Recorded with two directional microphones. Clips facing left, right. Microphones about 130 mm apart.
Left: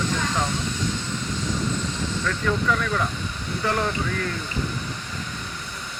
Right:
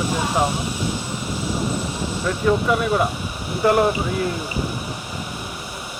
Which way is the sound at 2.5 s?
20° right (ahead or behind).